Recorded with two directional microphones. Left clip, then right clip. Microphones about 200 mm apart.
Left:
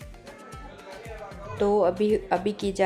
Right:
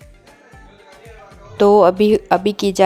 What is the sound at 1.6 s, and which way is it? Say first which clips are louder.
Speech: right 11 dB; 40° right (ahead or behind).